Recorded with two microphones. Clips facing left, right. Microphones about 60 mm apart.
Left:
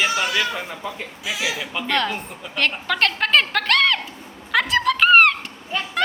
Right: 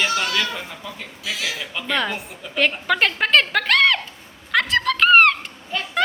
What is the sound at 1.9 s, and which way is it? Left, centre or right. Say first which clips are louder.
A woman's voice: even; centre.